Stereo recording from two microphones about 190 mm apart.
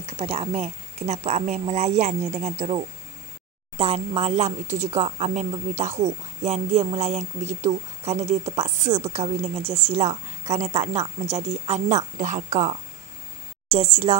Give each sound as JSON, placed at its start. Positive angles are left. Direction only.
{"t": 0.0, "sound": "speech", "side_deg": -30}